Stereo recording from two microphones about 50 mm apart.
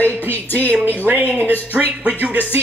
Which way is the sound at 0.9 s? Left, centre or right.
Right.